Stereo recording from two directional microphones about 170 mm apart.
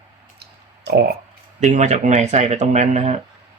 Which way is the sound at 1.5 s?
45° right (ahead or behind).